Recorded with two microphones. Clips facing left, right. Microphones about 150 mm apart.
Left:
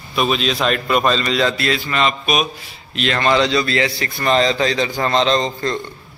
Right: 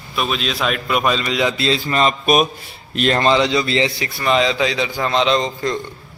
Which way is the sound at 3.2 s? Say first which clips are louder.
Left 2 dB; 20° right (ahead or behind).